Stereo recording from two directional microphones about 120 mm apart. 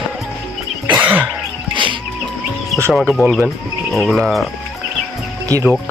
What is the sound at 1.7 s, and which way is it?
Music, 45° right (ahead or behind).